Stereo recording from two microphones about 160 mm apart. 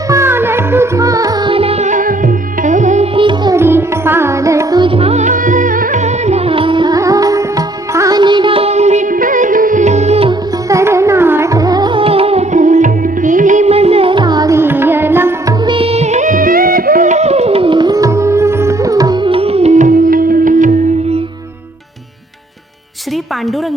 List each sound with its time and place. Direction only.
0.1 s music: 15° right (ahead or behind); by 3.1 s 50° right (ahead or behind)
3.2 s music: 30° right (ahead or behind)
3.5 s music: 15° right (ahead or behind); by 10.3 s 40° right (ahead or behind)
10.7 s carnatic music: 20° right (ahead or behind)
15.6 s music: 35° right (ahead or behind); by 20.7 s 55° right (ahead or behind)